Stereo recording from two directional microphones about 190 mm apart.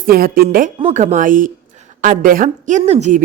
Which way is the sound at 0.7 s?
35° right (ahead or behind).